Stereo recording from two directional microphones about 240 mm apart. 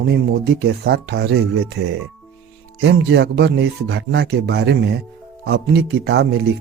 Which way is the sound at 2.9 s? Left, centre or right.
Right.